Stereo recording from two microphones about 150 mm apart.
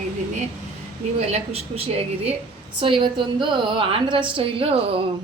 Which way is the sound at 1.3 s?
45° right (ahead or behind).